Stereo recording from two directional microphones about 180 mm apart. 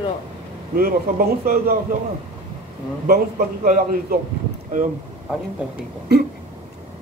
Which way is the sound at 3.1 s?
50° right (ahead or behind).